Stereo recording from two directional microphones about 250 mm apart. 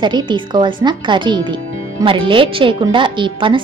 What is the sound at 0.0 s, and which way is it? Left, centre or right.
Speech, centre.